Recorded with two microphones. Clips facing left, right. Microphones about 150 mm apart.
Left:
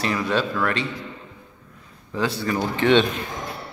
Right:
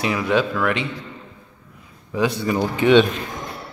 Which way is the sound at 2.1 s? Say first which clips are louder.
Right 3 dB; 15° right (ahead or behind).